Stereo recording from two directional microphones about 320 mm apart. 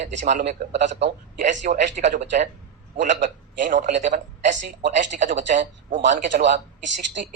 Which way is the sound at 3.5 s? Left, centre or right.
Right.